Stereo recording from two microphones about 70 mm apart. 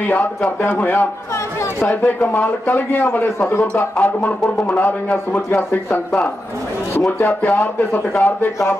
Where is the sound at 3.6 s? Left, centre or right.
Centre.